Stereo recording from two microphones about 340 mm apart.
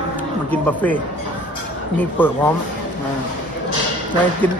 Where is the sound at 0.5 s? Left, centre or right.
Centre.